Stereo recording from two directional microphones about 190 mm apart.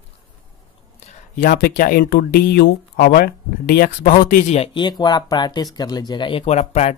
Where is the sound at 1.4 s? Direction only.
50° left (ahead or behind).